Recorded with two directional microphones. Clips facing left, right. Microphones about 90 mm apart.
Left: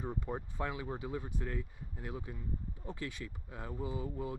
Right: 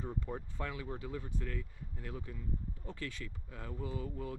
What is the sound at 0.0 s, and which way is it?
Speech, 20° left (ahead or behind).